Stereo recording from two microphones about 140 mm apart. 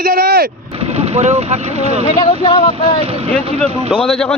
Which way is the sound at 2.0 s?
35° left (ahead or behind).